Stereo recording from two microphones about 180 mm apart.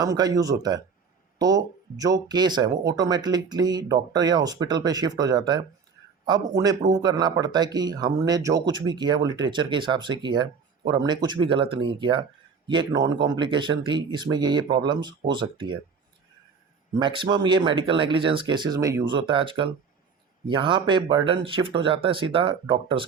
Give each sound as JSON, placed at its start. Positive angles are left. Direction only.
{"t": 0.0, "sound": "speech", "side_deg": -20}
{"t": 17.0, "sound": "speech", "side_deg": -25}